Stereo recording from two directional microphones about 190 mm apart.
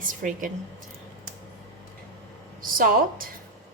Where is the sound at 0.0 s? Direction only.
45° right (ahead or behind).